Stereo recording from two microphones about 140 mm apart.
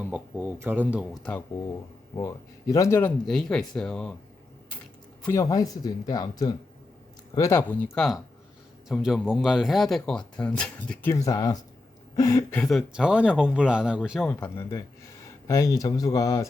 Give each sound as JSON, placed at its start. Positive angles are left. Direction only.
{"t": 0.0, "sound": "speech", "side_deg": -10}
{"t": 1.2, "sound": "speech", "side_deg": 10}
{"t": 2.1, "sound": "speech", "side_deg": 25}
{"t": 3.0, "sound": "speech", "side_deg": 5}
{"t": 5.3, "sound": "speech", "side_deg": 25}
{"t": 11.1, "sound": "speech", "side_deg": 25}
{"t": 12.5, "sound": "speech", "side_deg": 0}
{"t": 14.3, "sound": "speech", "side_deg": 15}